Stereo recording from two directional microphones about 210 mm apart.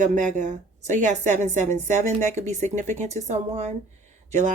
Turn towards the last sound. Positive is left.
turn(degrees=-35)  # may be behind; listen again after turning